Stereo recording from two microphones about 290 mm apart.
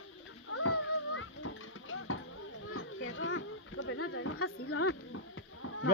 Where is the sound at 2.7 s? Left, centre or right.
Left.